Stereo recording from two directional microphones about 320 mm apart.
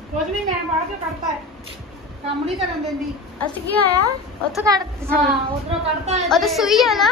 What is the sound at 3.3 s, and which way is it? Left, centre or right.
Speech, centre.